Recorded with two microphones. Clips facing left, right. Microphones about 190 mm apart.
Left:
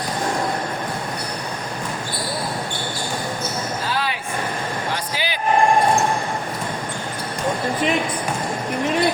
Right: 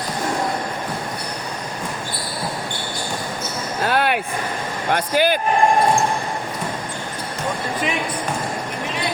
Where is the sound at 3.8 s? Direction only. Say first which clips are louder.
Right 8 dB; 60° right (ahead or behind).